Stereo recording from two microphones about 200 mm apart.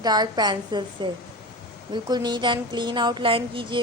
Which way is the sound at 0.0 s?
20° right (ahead or behind).